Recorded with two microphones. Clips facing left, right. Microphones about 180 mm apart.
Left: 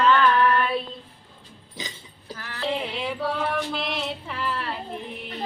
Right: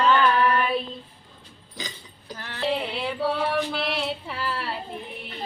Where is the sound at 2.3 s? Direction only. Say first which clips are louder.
Right 1 dB; 30° right (ahead or behind).